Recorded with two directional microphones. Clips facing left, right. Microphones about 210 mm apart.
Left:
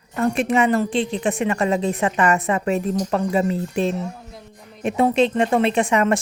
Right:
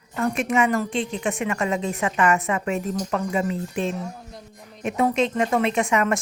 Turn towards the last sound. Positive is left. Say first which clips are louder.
# left 3 dB
turn(degrees=30)  # may be behind; listen again after turning